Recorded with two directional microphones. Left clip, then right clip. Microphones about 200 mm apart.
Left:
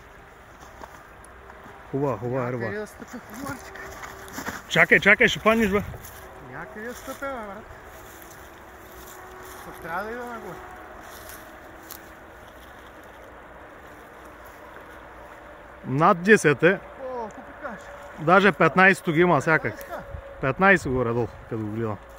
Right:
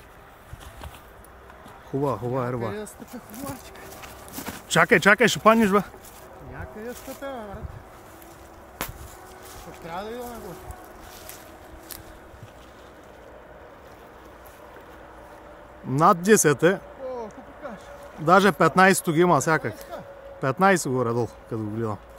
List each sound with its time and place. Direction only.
2.0 s speech: centre (ahead or behind)
4.0 s a sound: 15° right (ahead or behind)
4.8 s speech: 20° right (ahead or behind)
9.7 s speech: 30° right (ahead or behind)
15.9 s speech: 5° right (ahead or behind)
17.1 s a sound: 15° right (ahead or behind)
18.2 s speech: centre (ahead or behind)